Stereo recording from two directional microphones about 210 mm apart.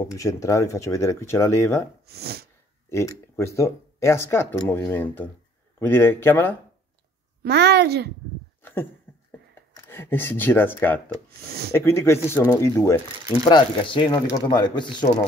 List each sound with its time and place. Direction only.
0.1 s speech: 15° left (ahead or behind)
2.0 s a woman's voice: 50° right (ahead or behind)
2.9 s speech: 15° left (ahead or behind)
7.4 s a woman's voice: 50° right (ahead or behind)
9.1 s a sound: 10° left (ahead or behind)
9.8 s speech: 10° left (ahead or behind)